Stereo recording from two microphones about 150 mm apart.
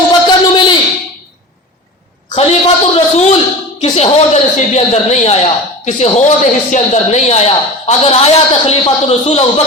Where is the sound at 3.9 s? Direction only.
45° left (ahead or behind).